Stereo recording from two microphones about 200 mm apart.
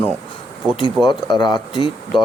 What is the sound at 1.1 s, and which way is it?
Speech, 20° left (ahead or behind).